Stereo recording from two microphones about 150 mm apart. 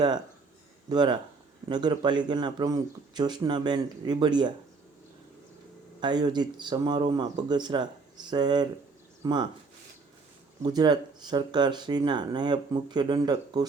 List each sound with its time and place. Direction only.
0.9 s speech: 30° right (ahead or behind)
6.0 s speech: 30° right (ahead or behind)
10.6 s speech: 25° right (ahead or behind)